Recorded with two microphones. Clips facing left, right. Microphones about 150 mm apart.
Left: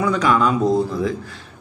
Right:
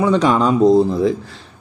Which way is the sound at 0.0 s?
30° right (ahead or behind).